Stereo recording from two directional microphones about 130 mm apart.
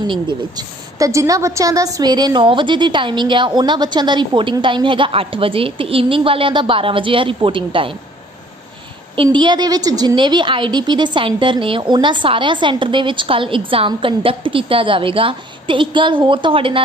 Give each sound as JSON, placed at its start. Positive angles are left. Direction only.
{"t": 0.0, "sound": "a woman's voice", "side_deg": -35}
{"t": 9.1, "sound": "a woman's voice", "side_deg": -40}